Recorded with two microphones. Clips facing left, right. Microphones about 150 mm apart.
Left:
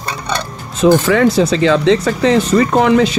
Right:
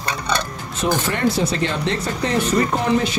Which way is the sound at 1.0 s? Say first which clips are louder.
Left 8 dB; 90° left.